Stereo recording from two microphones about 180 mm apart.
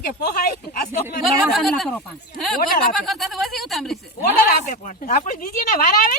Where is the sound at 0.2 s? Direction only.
55° left (ahead or behind).